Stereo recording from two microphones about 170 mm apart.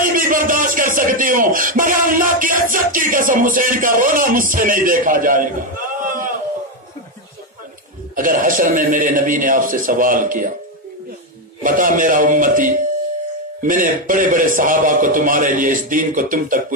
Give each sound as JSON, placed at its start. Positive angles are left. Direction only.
{"t": 0.0, "sound": "speech", "side_deg": -55}
{"t": 8.2, "sound": "a man's voice", "side_deg": -50}
{"t": 11.6, "sound": "a man's voice", "side_deg": -50}